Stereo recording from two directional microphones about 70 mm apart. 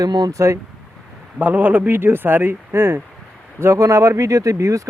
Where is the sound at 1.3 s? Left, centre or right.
Right.